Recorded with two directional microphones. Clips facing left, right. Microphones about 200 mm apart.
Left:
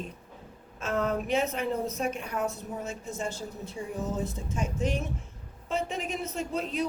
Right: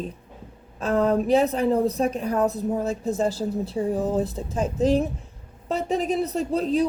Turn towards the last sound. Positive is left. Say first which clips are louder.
# right 9 dB
turn(degrees=-35)  # may be behind; listen again after turning